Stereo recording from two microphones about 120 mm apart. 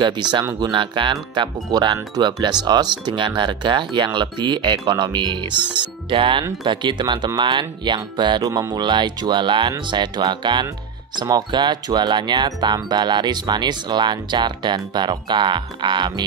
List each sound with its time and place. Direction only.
0.0 s speech: 40° right (ahead or behind)